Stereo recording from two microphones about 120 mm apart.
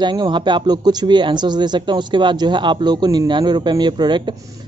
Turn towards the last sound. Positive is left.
turn(degrees=-40)  # may be behind; listen again after turning